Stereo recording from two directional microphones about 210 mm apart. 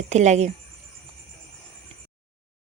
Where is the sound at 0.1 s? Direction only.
35° right (ahead or behind).